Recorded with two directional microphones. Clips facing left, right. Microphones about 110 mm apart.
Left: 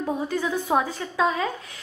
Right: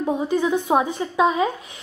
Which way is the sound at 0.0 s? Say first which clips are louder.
Right 5 dB; 20° right (ahead or behind).